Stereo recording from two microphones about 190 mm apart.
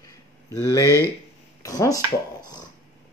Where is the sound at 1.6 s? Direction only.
20° left (ahead or behind).